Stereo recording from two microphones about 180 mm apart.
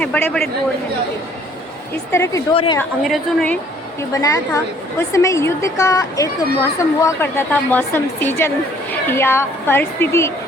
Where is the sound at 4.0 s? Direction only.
20° left (ahead or behind).